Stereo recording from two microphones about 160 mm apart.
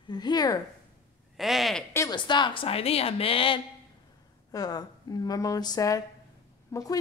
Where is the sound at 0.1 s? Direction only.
25° left (ahead or behind).